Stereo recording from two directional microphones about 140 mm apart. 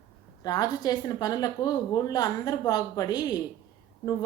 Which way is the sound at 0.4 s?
25° left (ahead or behind).